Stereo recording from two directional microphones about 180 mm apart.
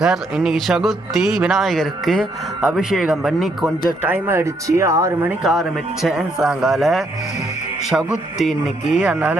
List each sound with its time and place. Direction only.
0.0 s speech: centre (ahead or behind)
5.4 s speech: centre (ahead or behind)